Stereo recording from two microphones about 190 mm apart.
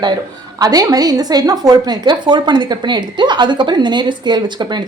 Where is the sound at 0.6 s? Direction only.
20° right (ahead or behind).